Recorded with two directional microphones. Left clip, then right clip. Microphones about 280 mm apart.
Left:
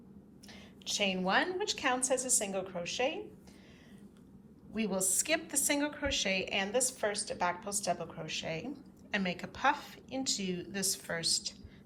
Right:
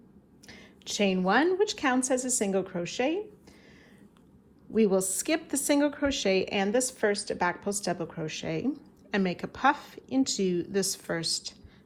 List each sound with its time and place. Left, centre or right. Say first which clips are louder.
0.4 s a woman's voice: right 1 dB; right
4.7 s a woman's voice: right 10 dB; centre